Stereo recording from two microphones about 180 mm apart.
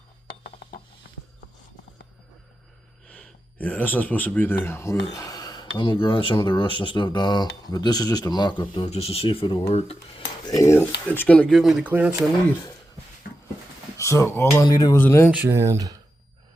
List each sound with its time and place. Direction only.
3.1 s speech: 5° left (ahead or behind); by 10.2 s 35° left (ahead or behind)
10.4 s speech: 20° left (ahead or behind); by 12.1 s 10° right (ahead or behind)
13.9 s speech: 15° left (ahead or behind)
15.3 s speech: 10° right (ahead or behind)